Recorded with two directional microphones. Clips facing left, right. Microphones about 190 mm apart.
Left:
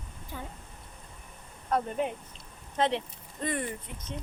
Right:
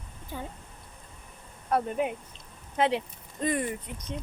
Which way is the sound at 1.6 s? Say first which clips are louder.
Right 2 dB; 10° right (ahead or behind).